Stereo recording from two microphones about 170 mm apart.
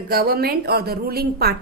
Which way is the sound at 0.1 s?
65° right (ahead or behind).